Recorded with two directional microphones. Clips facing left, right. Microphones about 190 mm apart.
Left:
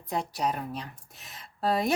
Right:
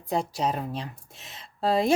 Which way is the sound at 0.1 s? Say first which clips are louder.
Right 3 dB; 25° right (ahead or behind).